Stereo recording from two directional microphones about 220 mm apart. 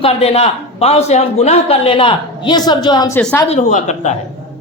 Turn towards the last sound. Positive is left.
turn(degrees=30)  # may be behind; listen again after turning